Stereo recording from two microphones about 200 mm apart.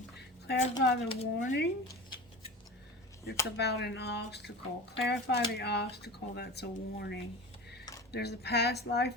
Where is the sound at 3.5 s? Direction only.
55° left (ahead or behind).